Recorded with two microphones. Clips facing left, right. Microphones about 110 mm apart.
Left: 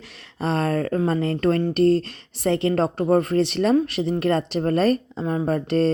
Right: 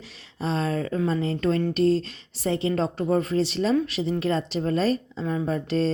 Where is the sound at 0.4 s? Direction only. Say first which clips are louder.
Left 4 dB; 55° left (ahead or behind).